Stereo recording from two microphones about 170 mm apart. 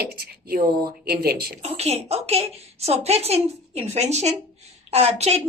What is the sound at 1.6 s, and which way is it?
A woman's voice, 35° right (ahead or behind).